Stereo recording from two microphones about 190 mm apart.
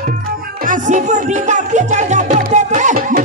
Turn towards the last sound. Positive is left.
turn(degrees=-40)  # may be behind; listen again after turning